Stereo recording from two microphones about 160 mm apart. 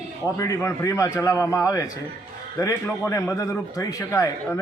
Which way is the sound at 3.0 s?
20° left (ahead or behind).